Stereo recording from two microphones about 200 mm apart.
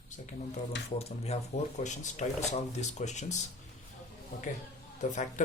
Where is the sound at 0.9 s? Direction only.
30° left (ahead or behind).